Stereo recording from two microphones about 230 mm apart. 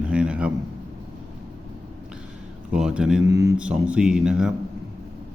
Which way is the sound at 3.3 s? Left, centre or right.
Centre.